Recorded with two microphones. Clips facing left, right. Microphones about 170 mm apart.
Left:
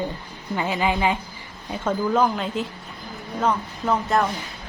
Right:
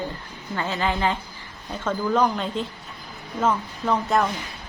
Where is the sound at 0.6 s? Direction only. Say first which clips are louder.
Left 2 dB; 15° left (ahead or behind).